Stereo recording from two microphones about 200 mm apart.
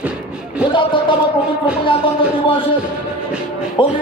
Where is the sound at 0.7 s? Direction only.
25° left (ahead or behind).